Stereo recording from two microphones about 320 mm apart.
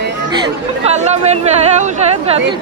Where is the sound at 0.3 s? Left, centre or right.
Centre.